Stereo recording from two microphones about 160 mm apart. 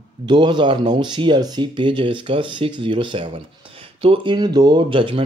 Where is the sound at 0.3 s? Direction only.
30° right (ahead or behind).